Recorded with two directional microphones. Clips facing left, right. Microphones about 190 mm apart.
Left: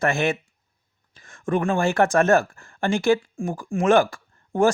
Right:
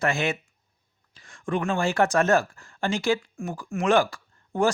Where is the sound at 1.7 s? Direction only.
50° left (ahead or behind).